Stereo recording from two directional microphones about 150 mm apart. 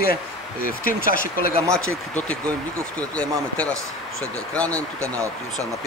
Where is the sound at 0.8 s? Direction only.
70° left (ahead or behind).